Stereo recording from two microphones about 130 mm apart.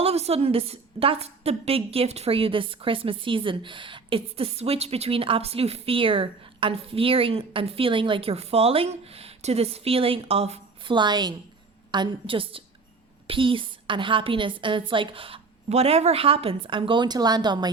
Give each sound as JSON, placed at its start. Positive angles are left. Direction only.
{"t": 0.0, "sound": "a woman's voice", "side_deg": -50}
{"t": 10.9, "sound": "a woman's voice", "side_deg": -35}